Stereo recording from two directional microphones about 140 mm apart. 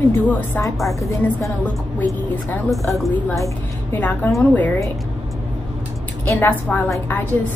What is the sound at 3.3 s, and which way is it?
Speech, 20° left (ahead or behind).